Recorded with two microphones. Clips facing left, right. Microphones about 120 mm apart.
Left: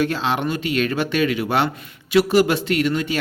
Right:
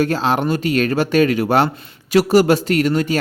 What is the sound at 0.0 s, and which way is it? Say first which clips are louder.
Speech: right 4 dB; 40° right (ahead or behind).